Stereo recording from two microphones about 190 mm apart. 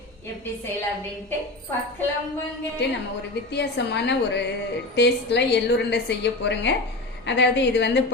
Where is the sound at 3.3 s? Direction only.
65° left (ahead or behind).